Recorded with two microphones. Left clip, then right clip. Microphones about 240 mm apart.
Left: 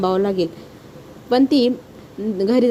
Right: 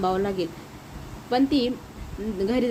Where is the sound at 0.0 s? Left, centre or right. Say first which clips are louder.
Left 6 dB; left.